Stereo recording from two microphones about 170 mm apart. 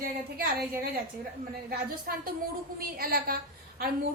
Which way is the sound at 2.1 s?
60° right (ahead or behind).